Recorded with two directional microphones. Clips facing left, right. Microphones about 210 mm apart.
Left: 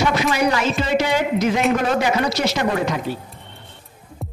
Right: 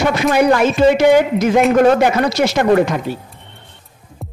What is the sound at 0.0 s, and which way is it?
Speech, 55° right (ahead or behind).